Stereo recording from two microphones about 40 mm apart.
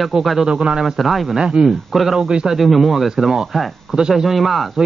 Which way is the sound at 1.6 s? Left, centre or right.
Centre.